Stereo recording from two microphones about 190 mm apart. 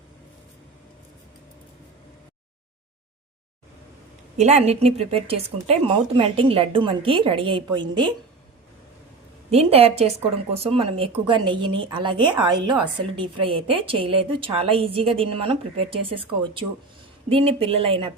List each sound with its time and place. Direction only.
4.4 s a woman's voice: 35° right (ahead or behind)
9.5 s a woman's voice: 30° right (ahead or behind)